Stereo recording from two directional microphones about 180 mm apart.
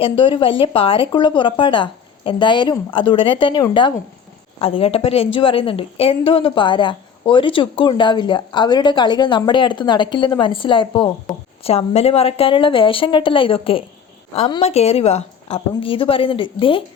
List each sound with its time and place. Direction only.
0.0 s a woman's voice: 30° left (ahead or behind)